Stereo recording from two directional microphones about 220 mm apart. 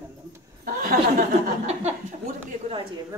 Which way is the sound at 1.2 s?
30° right (ahead or behind).